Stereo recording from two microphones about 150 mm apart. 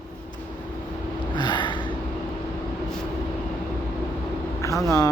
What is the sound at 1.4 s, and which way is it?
Gasp, 30° left (ahead or behind).